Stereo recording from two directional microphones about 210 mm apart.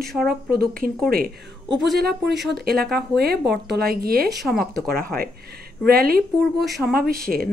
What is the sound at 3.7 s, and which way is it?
Speech, 45° right (ahead or behind).